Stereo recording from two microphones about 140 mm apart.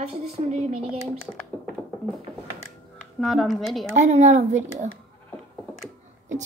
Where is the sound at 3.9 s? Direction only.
60° right (ahead or behind).